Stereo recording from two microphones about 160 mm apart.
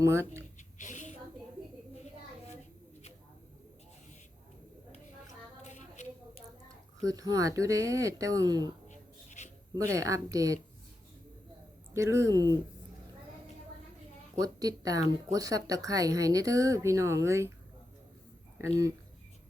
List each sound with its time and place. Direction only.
0.0 s speech: 15° right (ahead or behind)
0.8 s a sound: 50° left (ahead or behind)
5.6 s a sound: 45° left (ahead or behind)
6.7 s speech: 20° right (ahead or behind)
8.9 s writing: 50° left (ahead or behind)
9.7 s speech: 20° right (ahead or behind)
11.9 s speech: 20° right (ahead or behind)
14.3 s speech: 20° right (ahead or behind)